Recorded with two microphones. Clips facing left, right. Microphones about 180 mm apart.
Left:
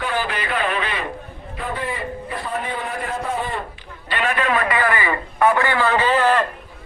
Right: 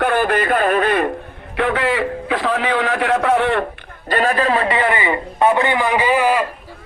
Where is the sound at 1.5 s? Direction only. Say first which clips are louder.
Right 9 dB; 75° right (ahead or behind).